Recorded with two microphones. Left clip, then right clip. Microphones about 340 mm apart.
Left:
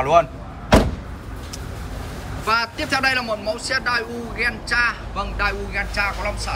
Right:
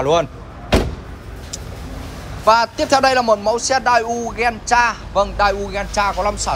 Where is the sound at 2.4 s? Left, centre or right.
Centre.